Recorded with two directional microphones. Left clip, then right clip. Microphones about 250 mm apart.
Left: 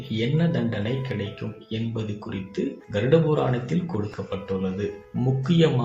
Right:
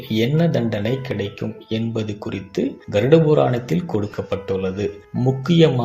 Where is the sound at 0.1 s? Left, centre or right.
Right.